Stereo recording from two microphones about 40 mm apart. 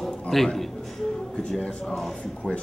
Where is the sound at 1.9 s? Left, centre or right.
Centre.